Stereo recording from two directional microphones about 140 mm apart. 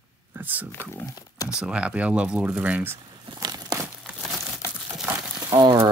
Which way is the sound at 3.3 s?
30° right (ahead or behind).